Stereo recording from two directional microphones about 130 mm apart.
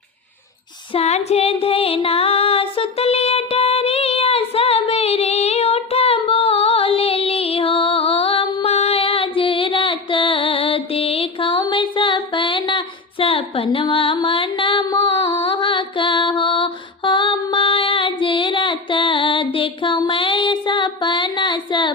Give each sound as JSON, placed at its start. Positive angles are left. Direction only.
{"t": 0.9, "sound": "female singing", "side_deg": 55}